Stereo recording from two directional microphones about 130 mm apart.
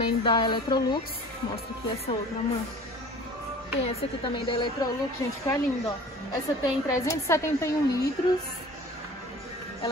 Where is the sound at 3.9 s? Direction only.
45° left (ahead or behind); by 8.0 s 20° left (ahead or behind).